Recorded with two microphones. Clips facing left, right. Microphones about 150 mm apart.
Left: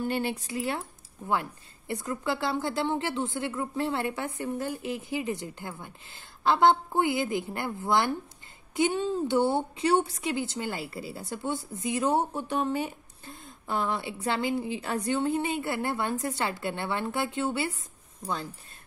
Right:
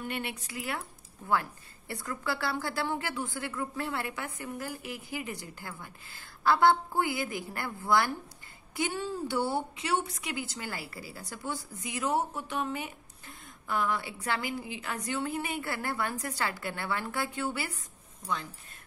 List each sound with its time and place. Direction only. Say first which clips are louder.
0.0 s a woman's voice: left 7 dB; 30° left (ahead or behind)
9.8 s a woman's voice: left 7 dB; 35° left (ahead or behind)